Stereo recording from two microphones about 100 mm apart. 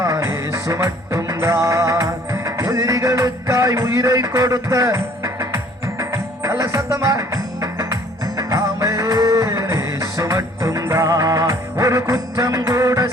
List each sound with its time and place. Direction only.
0.0 s music: 30° right (ahead or behind)